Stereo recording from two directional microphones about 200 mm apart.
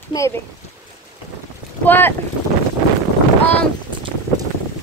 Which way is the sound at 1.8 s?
10° left (ahead or behind).